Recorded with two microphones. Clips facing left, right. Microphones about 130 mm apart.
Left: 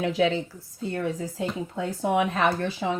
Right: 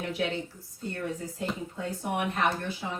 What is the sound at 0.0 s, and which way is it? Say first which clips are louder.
Speech: left 7 dB; 90° left.